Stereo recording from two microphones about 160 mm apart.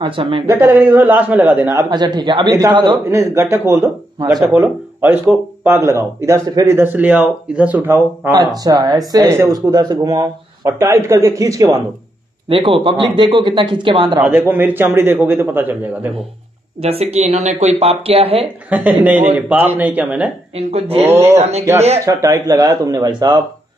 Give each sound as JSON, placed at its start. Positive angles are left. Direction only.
{"t": 0.0, "sound": "speech", "side_deg": -35}
{"t": 0.5, "sound": "speech", "side_deg": -15}
{"t": 3.1, "sound": "speech", "side_deg": -15}
{"t": 5.0, "sound": "speech", "side_deg": -10}
{"t": 8.6, "sound": "speech", "side_deg": -25}
{"t": 12.4, "sound": "speech", "side_deg": -35}
{"t": 14.5, "sound": "speech", "side_deg": -10}
{"t": 16.8, "sound": "speech", "side_deg": -40}
{"t": 18.7, "sound": "speech", "side_deg": -10}
{"t": 20.5, "sound": "speech", "side_deg": -40}
{"t": 22.0, "sound": "speech", "side_deg": -20}